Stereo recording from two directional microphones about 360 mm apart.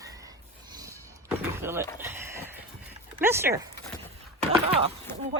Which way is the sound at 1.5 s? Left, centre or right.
Centre.